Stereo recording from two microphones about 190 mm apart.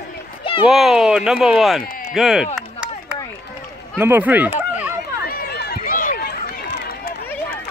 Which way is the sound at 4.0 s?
10° right (ahead or behind).